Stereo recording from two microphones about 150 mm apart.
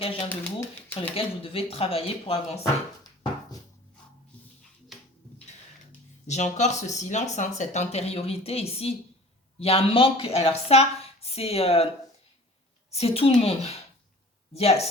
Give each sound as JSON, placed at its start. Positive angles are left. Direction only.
{"t": 0.3, "sound": "speech", "side_deg": 10}
{"t": 1.1, "sound": "speech", "side_deg": 40}
{"t": 6.2, "sound": "speech", "side_deg": 50}
{"t": 12.9, "sound": "speech", "side_deg": 40}